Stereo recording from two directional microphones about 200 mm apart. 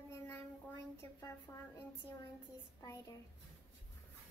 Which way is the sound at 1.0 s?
15° left (ahead or behind).